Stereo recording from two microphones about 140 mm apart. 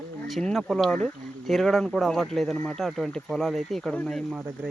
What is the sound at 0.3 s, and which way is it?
Speech, 5° left (ahead or behind).